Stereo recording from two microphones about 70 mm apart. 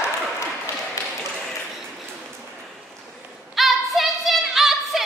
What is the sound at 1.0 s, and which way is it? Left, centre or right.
Tap, left.